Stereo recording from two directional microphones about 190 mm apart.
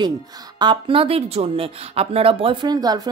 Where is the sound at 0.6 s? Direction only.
25° right (ahead or behind).